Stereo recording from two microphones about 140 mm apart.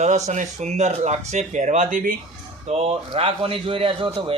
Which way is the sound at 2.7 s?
50° right (ahead or behind).